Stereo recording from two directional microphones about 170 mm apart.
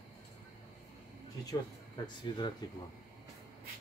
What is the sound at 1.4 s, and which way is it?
Speech, 25° left (ahead or behind).